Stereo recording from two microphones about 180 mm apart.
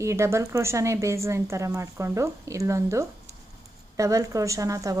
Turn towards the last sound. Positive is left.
turn(degrees=-20)  # may be behind; listen again after turning